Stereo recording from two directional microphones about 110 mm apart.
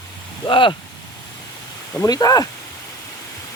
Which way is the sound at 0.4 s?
50° left (ahead or behind).